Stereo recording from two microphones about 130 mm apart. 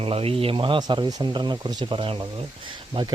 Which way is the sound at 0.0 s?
45° right (ahead or behind).